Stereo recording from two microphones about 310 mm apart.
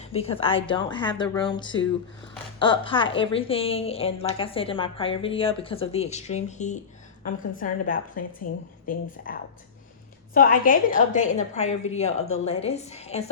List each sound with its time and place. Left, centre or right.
0.0 s a woman's voice: centre